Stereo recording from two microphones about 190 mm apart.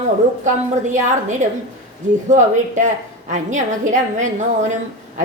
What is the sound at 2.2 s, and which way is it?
A woman's voice, 40° right (ahead or behind).